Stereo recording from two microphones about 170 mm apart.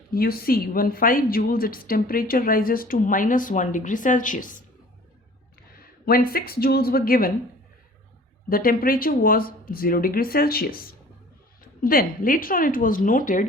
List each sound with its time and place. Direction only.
0.1 s a woman's voice: 60° left (ahead or behind)
5.7 s speech: 60° left (ahead or behind)
8.4 s a woman's voice: 60° left (ahead or behind)